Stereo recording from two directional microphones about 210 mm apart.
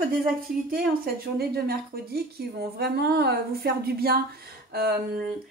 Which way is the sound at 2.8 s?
50° right (ahead or behind).